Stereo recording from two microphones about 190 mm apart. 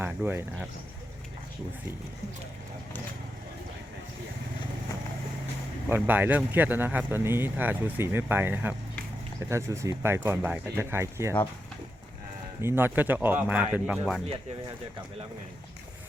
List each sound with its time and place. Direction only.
0.0 s speech: 10° right (ahead or behind)
5.9 s speech: 10° right (ahead or behind)
12.6 s speech: 10° right (ahead or behind)